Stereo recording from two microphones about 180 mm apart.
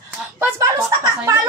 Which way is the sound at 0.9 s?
15° right (ahead or behind).